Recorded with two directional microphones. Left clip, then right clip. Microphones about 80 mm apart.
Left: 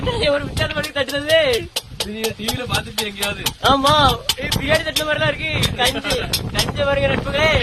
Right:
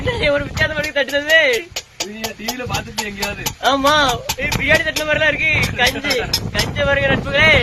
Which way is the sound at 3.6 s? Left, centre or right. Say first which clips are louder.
Even; centre.